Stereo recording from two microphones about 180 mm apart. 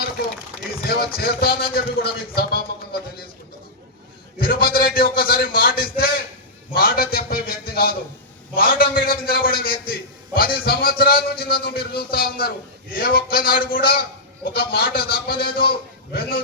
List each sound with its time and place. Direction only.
0.9 s a man's voice: 55° left (ahead or behind)
4.4 s a man's voice: 55° left (ahead or behind)